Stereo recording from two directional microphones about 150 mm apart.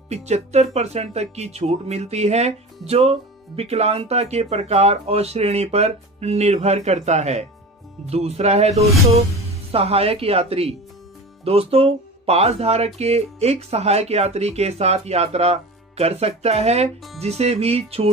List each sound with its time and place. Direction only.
0.1 s speech: 45° right (ahead or behind)